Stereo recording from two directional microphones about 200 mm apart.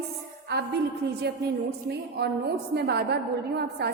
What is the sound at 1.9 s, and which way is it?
A woman's voice, 55° right (ahead or behind).